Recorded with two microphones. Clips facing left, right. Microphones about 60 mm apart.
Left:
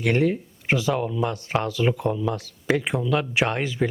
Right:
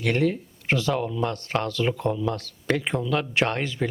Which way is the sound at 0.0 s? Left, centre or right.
Centre.